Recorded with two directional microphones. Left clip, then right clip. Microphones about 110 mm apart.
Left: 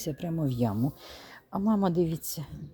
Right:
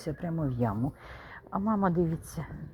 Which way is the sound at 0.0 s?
50° left (ahead or behind).